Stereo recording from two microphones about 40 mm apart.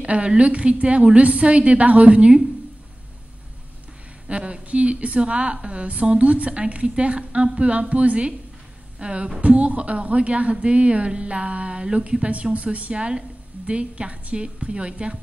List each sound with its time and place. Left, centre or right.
0.0 s a woman's voice: right
4.3 s a woman's voice: right